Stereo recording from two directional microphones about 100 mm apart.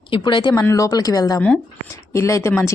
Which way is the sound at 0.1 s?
50° left (ahead or behind).